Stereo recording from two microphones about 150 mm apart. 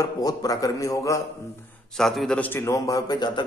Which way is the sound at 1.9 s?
5° left (ahead or behind).